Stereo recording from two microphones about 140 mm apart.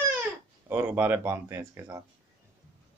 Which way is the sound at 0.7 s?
15° right (ahead or behind).